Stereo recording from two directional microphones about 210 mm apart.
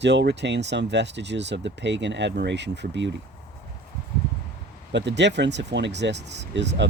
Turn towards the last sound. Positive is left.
turn(degrees=-55)  # may be behind; listen again after turning